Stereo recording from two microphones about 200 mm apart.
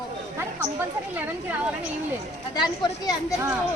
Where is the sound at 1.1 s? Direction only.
10° right (ahead or behind).